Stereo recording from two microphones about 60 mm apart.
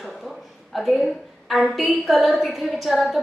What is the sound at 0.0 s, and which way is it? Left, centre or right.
A woman's voice, centre.